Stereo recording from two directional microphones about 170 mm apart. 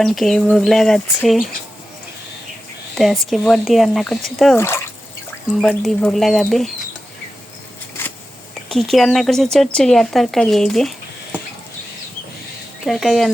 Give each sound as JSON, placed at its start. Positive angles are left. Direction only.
{"t": 0.0, "sound": "speech", "side_deg": 0}
{"t": 2.9, "sound": "speech", "side_deg": 0}
{"t": 4.5, "sound": "speech", "side_deg": 15}
{"t": 8.7, "sound": "speech", "side_deg": 0}
{"t": 12.8, "sound": "speech", "side_deg": 0}